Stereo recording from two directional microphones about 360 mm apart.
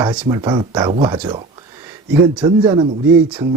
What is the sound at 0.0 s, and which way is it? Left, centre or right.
A man's voice, centre.